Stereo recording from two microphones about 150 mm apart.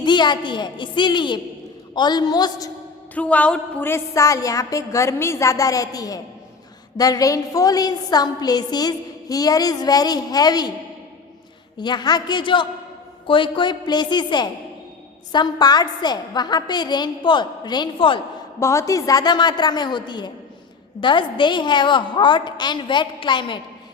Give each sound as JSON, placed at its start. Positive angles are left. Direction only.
{"t": 0.0, "sound": "a woman's voice", "side_deg": 30}
{"t": 3.2, "sound": "a woman's voice", "side_deg": 10}
{"t": 11.8, "sound": "a woman's voice", "side_deg": 30}
{"t": 18.6, "sound": "a woman's voice", "side_deg": 20}